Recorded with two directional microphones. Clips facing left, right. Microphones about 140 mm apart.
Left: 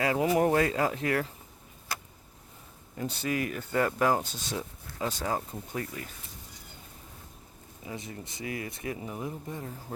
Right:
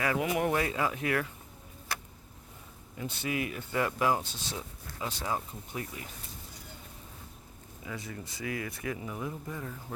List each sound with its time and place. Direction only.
0.0 s speech: 35° left (ahead or behind)
3.0 s speech: 40° left (ahead or behind)
7.9 s speech: 25° left (ahead or behind)